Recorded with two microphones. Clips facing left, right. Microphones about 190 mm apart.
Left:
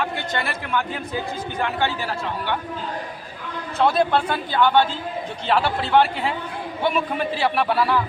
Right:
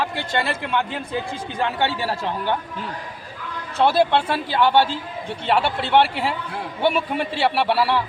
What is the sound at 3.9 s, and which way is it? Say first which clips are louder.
Speech: right 1 dB; 30° right (ahead or behind).